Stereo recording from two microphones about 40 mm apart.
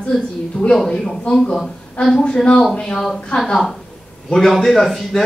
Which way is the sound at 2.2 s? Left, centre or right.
Left.